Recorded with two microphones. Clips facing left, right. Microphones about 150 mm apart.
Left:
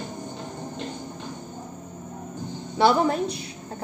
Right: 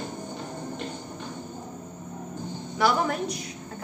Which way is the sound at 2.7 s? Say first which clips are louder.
Left 5 dB; 25° left (ahead or behind).